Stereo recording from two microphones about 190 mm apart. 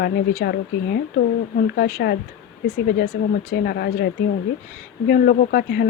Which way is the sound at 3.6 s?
55° left (ahead or behind).